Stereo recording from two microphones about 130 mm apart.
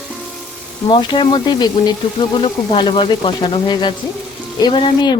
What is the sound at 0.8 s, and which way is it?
Speech, 35° left (ahead or behind).